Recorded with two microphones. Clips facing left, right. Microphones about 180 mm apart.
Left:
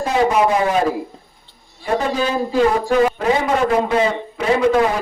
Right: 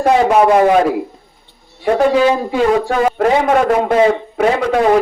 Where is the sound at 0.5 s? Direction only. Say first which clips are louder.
Right 7 dB; 60° right (ahead or behind).